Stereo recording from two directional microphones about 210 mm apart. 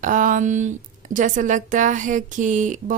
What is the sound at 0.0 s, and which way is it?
Speech, 40° right (ahead or behind).